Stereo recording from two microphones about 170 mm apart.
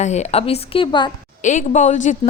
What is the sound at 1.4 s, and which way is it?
Speech, 45° left (ahead or behind).